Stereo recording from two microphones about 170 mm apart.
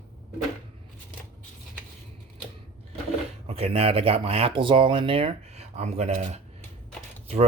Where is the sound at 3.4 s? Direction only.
35° right (ahead or behind).